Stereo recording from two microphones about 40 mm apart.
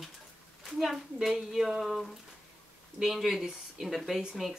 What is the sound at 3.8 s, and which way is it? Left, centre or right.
Speech, centre.